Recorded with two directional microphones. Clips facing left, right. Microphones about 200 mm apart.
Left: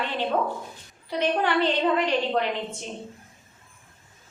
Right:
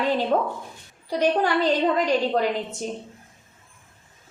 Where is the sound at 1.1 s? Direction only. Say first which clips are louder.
Right 3 dB; 40° right (ahead or behind).